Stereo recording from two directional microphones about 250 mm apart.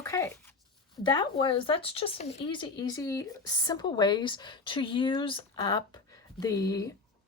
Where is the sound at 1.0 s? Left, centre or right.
Centre.